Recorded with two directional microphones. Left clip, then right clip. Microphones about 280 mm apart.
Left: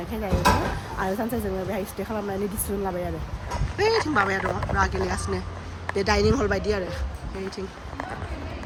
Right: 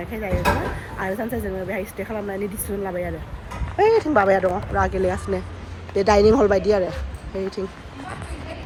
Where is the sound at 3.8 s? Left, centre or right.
Centre.